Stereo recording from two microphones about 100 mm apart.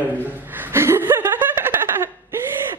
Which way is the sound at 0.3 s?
20° right (ahead or behind).